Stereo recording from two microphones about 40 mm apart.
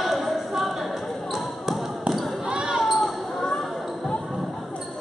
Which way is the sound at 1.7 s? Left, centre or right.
Centre.